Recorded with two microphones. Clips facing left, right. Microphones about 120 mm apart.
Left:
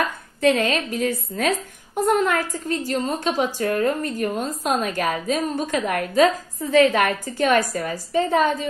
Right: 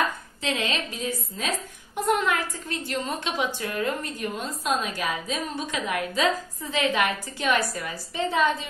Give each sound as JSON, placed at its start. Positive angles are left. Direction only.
{"t": 0.4, "sound": "a woman's voice", "side_deg": 50}
{"t": 2.0, "sound": "a woman's voice", "side_deg": 40}